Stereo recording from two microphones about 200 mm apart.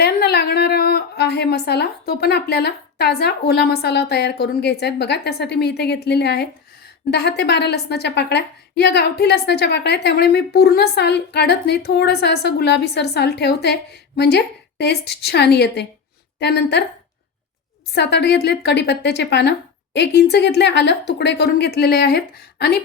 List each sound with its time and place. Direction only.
0.0 s a woman's voice: 55° left (ahead or behind)
17.9 s a woman's voice: 60° left (ahead or behind)